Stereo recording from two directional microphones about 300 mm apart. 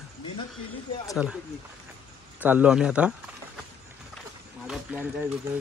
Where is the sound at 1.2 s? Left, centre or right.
Centre.